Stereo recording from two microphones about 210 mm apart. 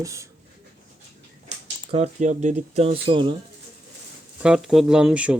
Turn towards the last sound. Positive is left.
turn(degrees=-5)  # may be behind; listen again after turning